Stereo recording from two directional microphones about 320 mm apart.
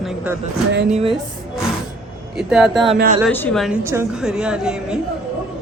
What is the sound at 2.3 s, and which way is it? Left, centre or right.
Speech, centre.